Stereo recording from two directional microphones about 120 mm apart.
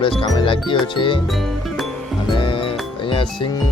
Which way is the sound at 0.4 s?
45° left (ahead or behind).